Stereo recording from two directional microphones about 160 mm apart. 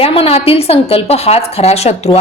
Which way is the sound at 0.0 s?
35° left (ahead or behind).